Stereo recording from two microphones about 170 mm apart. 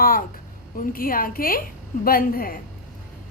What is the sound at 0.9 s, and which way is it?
A woman's voice, 55° left (ahead or behind).